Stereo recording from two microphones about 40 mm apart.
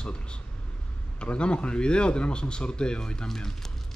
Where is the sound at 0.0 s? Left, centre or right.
Left.